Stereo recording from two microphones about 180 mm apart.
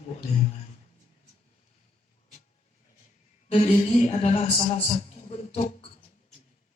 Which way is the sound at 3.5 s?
35° left (ahead or behind).